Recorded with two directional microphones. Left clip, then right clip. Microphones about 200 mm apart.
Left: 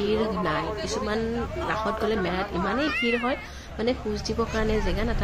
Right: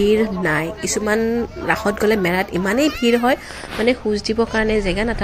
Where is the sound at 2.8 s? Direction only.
55° right (ahead or behind).